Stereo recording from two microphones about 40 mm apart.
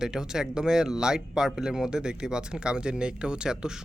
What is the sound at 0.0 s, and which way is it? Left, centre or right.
Speech, centre.